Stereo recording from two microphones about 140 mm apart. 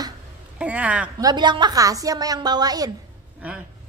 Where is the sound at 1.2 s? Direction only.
30° right (ahead or behind).